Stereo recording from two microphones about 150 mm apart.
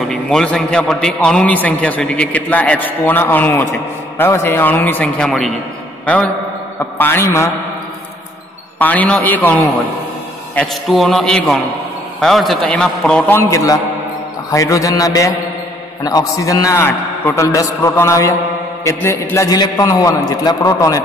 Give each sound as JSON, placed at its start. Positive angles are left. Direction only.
{"t": 0.1, "sound": "a man's voice", "side_deg": 5}
{"t": 8.7, "sound": "a man's voice", "side_deg": 10}
{"t": 13.4, "sound": "a man's voice", "side_deg": 20}